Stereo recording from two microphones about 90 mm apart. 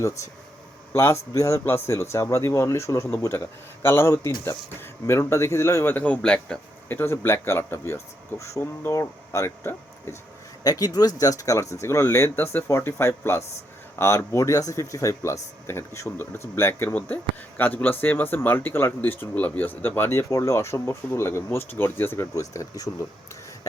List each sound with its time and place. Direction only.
0.0 s speech: 35° left (ahead or behind); by 6.6 s 15° left (ahead or behind)
6.8 s speech: 25° left (ahead or behind)
10.6 s speech: 45° left (ahead or behind); by 22.3 s 25° left (ahead or behind)
22.4 s speech: 40° left (ahead or behind)